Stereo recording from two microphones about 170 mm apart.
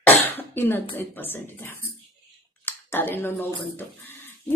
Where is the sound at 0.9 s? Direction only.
10° left (ahead or behind).